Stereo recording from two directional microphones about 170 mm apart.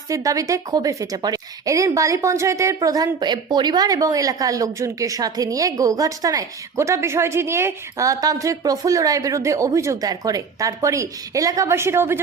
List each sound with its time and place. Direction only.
0.1 s a woman's voice: 20° right (ahead or behind)